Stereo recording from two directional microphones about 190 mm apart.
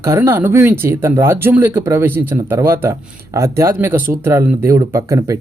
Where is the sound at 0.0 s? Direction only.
15° right (ahead or behind).